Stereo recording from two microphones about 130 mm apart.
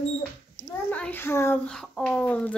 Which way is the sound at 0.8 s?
10° left (ahead or behind).